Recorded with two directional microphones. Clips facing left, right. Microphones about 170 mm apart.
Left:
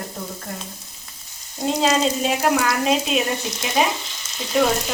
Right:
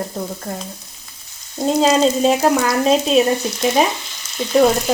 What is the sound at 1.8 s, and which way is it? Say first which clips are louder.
Speech: right 6 dB; 35° right (ahead or behind).